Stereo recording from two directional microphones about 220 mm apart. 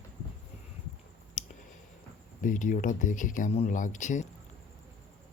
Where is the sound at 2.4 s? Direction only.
35° left (ahead or behind).